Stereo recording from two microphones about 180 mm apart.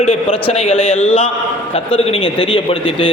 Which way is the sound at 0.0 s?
35° left (ahead or behind).